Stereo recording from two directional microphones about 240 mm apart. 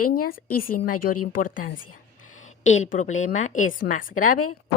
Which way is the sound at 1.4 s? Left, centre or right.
Left.